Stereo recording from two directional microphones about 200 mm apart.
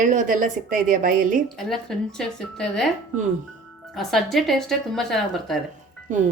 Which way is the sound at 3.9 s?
Centre (ahead or behind).